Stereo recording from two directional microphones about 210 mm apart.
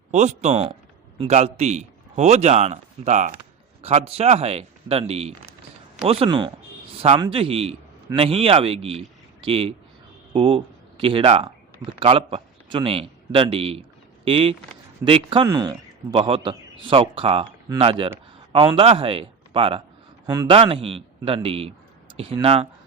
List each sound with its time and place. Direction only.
0.1 s a man's voice: 35° right (ahead or behind)